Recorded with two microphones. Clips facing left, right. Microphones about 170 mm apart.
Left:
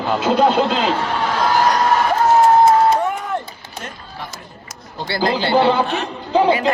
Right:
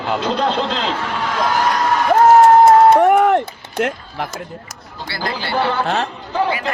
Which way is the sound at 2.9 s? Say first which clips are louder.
Right 7 dB; 70° right (ahead or behind).